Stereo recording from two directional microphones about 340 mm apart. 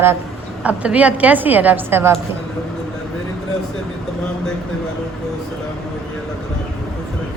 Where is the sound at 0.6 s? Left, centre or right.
Centre.